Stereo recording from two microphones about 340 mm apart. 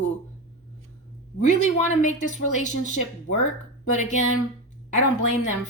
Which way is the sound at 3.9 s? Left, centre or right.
Left.